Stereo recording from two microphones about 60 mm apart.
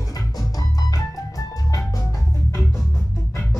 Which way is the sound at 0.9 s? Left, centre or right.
Left.